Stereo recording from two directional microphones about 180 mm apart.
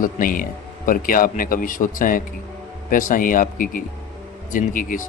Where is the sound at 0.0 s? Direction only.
50° left (ahead or behind).